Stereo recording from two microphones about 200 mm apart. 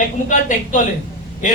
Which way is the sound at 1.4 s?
40° left (ahead or behind).